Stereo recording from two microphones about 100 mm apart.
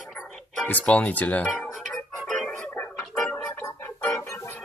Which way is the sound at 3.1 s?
15° left (ahead or behind).